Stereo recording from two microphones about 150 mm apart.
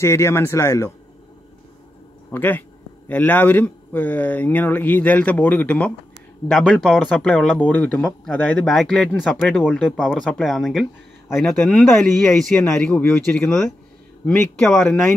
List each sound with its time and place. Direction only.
0.0 s speech: 20° left (ahead or behind)
2.3 s speech: 15° left (ahead or behind)